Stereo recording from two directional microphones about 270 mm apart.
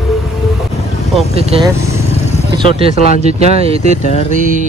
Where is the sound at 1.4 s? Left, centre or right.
Right.